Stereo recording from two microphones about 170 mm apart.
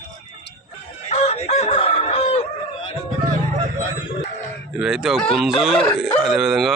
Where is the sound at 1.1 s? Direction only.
40° left (ahead or behind).